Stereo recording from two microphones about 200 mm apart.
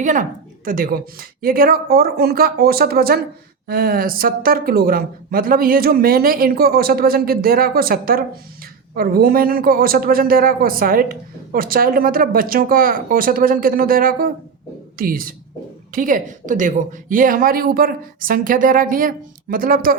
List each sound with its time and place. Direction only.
0.0 s speech: 40° right (ahead or behind)